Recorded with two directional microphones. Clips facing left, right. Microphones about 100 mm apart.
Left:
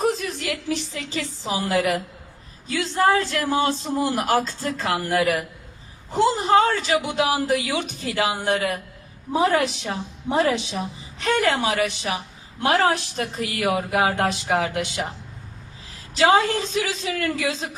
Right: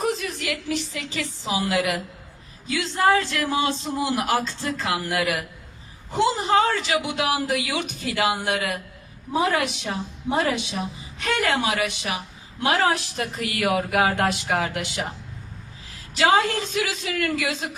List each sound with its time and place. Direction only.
0.1 s a woman's voice: 35° left (ahead or behind)
13.3 s a sound: 30° left (ahead or behind)
16.1 s speech: 30° left (ahead or behind)